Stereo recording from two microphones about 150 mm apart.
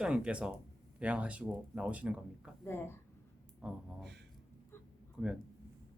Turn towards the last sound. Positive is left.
turn(degrees=-5)  # may be behind; listen again after turning